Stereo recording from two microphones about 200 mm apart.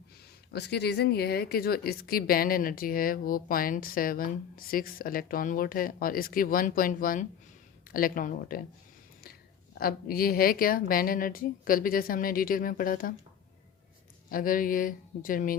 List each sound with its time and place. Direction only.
0.5 s a woman's voice: 55° left (ahead or behind)
9.7 s a woman's voice: 50° left (ahead or behind)
14.3 s a woman's voice: 45° left (ahead or behind)